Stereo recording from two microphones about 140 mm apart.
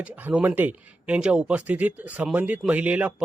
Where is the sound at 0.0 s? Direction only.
10° right (ahead or behind).